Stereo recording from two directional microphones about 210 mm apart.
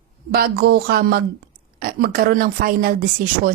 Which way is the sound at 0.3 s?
50° right (ahead or behind).